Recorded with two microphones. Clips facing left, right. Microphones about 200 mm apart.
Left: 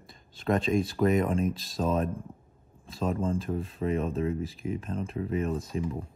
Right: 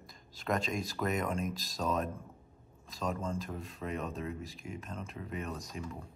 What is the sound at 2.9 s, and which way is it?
Speech, 30° left (ahead or behind).